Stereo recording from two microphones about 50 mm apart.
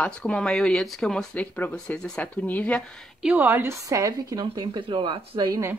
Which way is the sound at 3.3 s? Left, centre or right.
Right.